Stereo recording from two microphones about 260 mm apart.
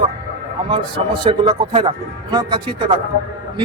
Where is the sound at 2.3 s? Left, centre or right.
Centre.